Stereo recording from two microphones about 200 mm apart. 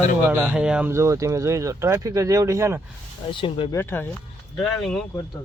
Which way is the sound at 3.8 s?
10° left (ahead or behind).